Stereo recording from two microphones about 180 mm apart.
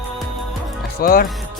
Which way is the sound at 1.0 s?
55° left (ahead or behind).